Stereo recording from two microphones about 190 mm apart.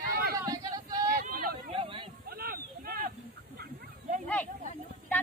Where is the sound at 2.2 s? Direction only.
50° right (ahead or behind).